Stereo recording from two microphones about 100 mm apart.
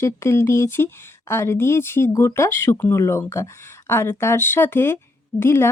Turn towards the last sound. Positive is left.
turn(degrees=25)  # may be behind; listen again after turning